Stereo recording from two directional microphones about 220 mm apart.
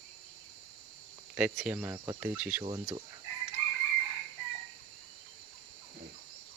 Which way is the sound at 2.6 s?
20° right (ahead or behind).